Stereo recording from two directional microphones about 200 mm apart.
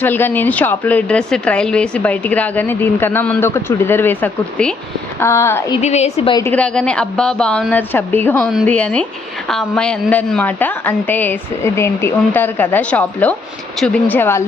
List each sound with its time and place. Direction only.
0.0 s a woman's voice: 10° left (ahead or behind)
5.7 s a woman's voice: 35° left (ahead or behind)
6.4 s a woman's voice: 5° left (ahead or behind)